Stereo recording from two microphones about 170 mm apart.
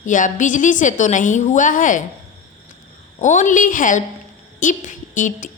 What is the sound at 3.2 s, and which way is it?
A woman's voice, 45° left (ahead or behind).